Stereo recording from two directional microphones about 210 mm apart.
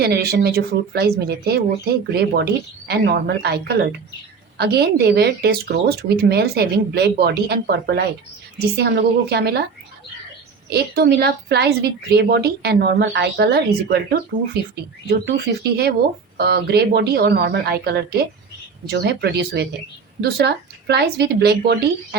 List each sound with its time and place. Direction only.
0.0 s a woman's voice: 50° right (ahead or behind)
10.7 s a woman's voice: 50° right (ahead or behind)